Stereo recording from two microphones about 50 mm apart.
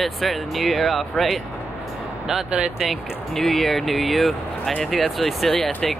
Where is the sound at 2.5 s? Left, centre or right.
Centre.